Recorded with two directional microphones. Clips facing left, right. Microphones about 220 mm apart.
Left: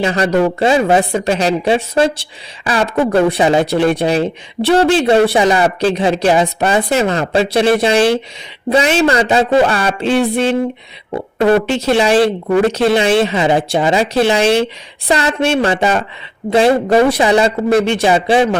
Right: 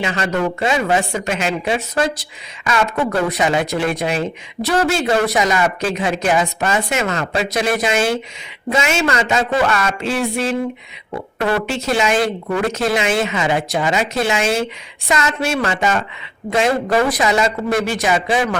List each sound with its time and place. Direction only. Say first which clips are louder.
0.0 s speech: left 6 dB; 35° left (ahead or behind)
11.8 s a man's voice: left 6 dB; 35° left (ahead or behind)